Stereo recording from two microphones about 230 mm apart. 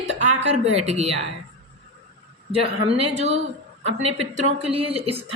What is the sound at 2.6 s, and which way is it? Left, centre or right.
A woman's voice, right.